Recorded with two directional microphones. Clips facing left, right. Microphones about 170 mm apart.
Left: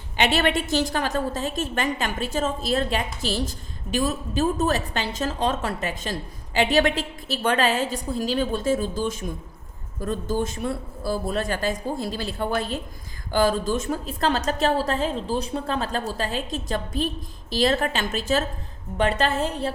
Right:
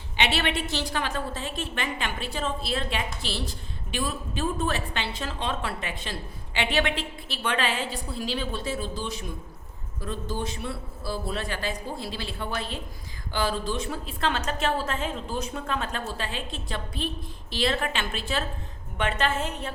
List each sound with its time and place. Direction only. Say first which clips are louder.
0.2 s a woman's voice: left 5 dB; 45° left (ahead or behind)